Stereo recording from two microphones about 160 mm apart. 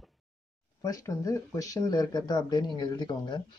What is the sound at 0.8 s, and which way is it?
Speech, 20° left (ahead or behind).